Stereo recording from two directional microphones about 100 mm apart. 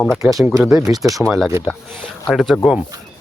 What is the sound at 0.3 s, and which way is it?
Speech, 35° right (ahead or behind).